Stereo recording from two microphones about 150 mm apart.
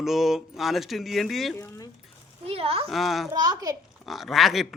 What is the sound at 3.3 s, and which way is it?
Speech, 25° right (ahead or behind).